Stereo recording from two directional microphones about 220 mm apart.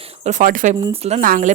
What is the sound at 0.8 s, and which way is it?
Speech, 25° right (ahead or behind).